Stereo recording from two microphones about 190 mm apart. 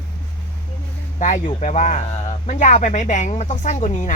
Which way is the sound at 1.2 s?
40° left (ahead or behind).